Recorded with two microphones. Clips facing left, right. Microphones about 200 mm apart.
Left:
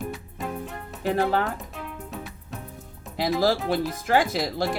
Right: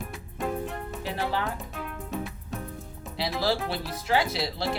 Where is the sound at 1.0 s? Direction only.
45° left (ahead or behind).